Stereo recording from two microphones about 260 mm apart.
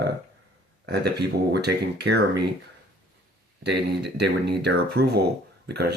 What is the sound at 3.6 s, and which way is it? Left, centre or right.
Speech, right.